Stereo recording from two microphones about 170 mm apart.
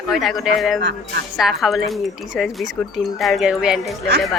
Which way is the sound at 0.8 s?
90° right.